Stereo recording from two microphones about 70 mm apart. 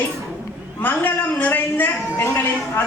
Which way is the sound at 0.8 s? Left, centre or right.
Left.